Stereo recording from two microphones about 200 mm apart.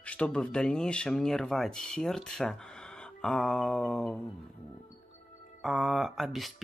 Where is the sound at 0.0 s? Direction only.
5° left (ahead or behind).